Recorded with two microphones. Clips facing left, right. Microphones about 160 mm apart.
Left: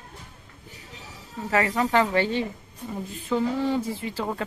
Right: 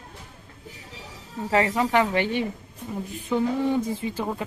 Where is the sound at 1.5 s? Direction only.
20° right (ahead or behind).